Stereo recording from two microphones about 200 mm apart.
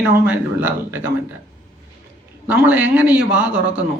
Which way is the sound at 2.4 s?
10° right (ahead or behind).